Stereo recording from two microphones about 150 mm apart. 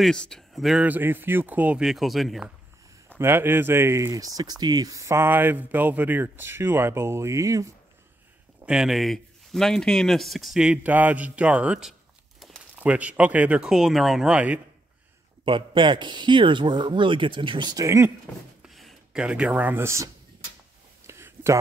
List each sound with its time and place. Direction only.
0.0 s speech: 5° left (ahead or behind)
3.2 s speech: 15° right (ahead or behind)
8.6 s speech: 5° right (ahead or behind)
15.4 s speech: 35° right (ahead or behind); by 18.1 s 20° right (ahead or behind)
18.7 s speech: centre (ahead or behind); by 20.1 s 15° right (ahead or behind)
21.1 s a sound: 20° right (ahead or behind)